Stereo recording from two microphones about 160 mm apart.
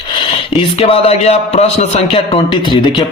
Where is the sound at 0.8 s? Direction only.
40° left (ahead or behind).